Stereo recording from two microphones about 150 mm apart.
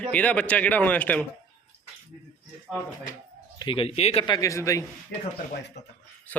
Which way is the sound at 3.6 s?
35° left (ahead or behind).